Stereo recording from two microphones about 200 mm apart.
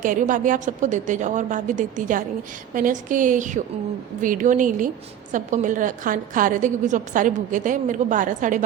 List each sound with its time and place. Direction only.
0.0 s a woman's voice: 40° right (ahead or behind)